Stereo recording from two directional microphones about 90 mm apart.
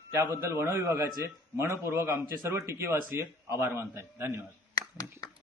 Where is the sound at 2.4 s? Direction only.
30° right (ahead or behind).